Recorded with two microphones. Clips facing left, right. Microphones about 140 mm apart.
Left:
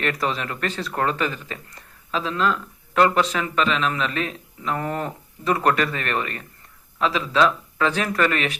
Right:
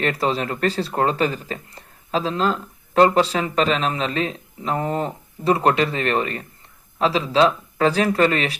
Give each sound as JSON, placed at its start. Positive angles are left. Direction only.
{"t": 0.0, "sound": "speech", "side_deg": -30}